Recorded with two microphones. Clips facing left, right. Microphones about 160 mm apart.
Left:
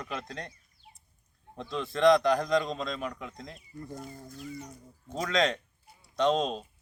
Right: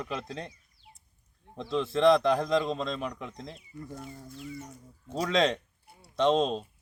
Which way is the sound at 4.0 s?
40° left (ahead or behind).